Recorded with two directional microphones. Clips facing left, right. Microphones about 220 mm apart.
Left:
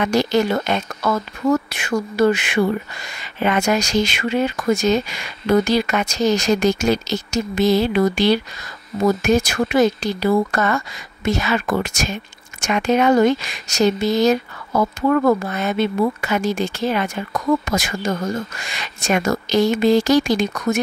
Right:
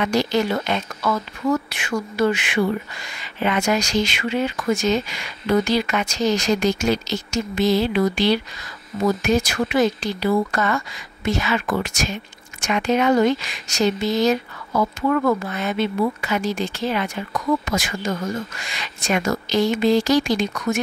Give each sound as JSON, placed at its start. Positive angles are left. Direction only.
{"t": 0.0, "sound": "speech", "side_deg": 50}